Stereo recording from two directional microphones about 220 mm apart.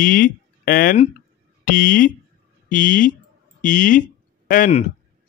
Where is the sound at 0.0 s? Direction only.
40° left (ahead or behind).